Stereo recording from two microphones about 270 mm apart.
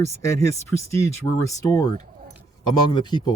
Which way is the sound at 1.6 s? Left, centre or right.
Centre.